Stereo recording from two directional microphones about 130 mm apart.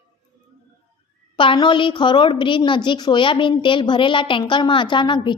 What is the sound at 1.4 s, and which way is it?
A woman's voice, 40° left (ahead or behind).